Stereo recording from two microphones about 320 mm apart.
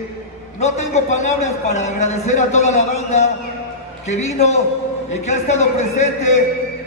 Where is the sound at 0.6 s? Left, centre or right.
Left.